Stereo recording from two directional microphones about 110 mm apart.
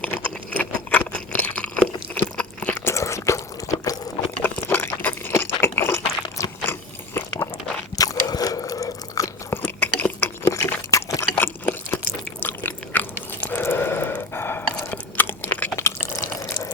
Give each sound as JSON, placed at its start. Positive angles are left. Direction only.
{"t": 0.5, "sound": "crunch", "side_deg": 15}
{"t": 2.7, "sound": "biting", "side_deg": 25}
{"t": 4.4, "sound": "a sound", "side_deg": 15}
{"t": 7.9, "sound": "biting", "side_deg": 35}
{"t": 9.9, "sound": "a sound", "side_deg": 15}
{"t": 12.4, "sound": "chewing", "side_deg": 15}
{"t": 15.7, "sound": "drip", "side_deg": 25}